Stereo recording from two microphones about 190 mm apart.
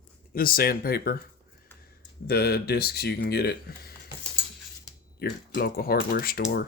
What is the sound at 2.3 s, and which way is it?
Speech, 55° left (ahead or behind).